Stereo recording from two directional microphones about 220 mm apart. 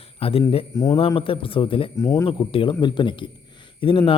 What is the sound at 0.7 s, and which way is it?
A man's voice, 15° left (ahead or behind).